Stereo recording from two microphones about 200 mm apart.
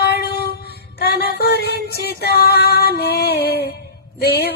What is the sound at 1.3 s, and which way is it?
Music, 55° left (ahead or behind).